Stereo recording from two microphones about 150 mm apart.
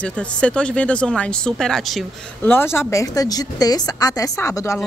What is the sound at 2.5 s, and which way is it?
A woman's voice, 15° left (ahead or behind).